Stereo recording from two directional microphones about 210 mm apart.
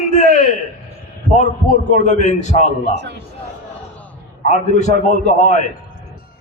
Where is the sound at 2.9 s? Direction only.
55° right (ahead or behind).